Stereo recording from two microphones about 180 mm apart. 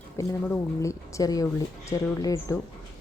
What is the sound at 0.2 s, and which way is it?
Speech, 15° left (ahead or behind).